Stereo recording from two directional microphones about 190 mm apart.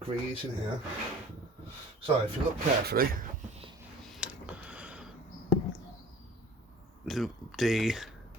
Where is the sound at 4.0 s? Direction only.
Centre (ahead or behind).